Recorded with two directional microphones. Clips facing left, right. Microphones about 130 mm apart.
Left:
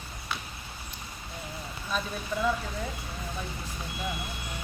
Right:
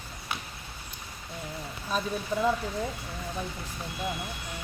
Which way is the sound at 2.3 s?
35° right (ahead or behind).